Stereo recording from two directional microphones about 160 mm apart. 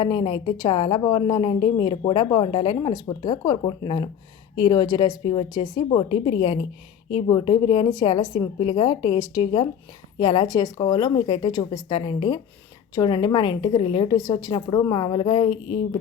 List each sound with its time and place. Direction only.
0.0 s a woman's voice: 30° left (ahead or behind)